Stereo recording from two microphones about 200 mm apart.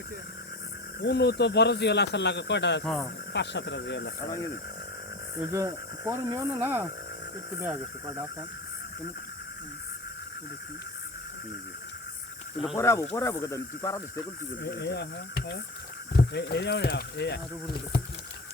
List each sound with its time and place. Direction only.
1.0 s speech: 55° left (ahead or behind)
2.8 s speech: 5° left (ahead or behind)
3.3 s speech: 60° left (ahead or behind)
5.4 s speech: 15° right (ahead or behind)
12.7 s speech: 15° left (ahead or behind)
14.6 s speech: 55° left (ahead or behind)